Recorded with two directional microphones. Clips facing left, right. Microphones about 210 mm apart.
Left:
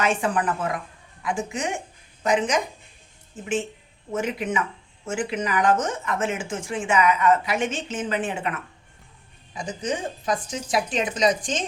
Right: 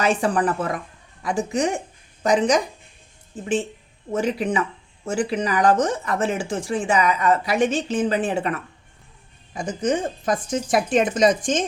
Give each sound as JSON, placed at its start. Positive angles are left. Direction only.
{"t": 0.0, "sound": "speech", "side_deg": -35}
{"t": 9.5, "sound": "speech", "side_deg": -50}